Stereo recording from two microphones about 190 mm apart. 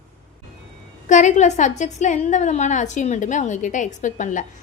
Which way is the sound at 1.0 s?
40° left (ahead or behind).